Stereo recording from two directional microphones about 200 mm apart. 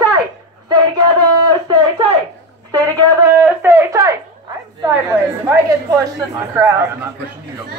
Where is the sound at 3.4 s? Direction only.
10° right (ahead or behind).